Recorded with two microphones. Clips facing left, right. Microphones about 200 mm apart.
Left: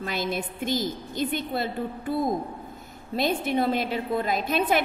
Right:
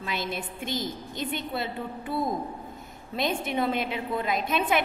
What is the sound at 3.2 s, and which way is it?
A woman's voice, 35° left (ahead or behind).